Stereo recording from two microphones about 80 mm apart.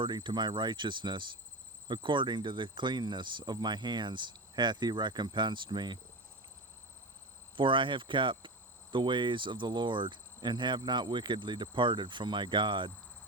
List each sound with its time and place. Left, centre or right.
0.0 s speech: right
1.9 s speech: right
7.5 s cricket: right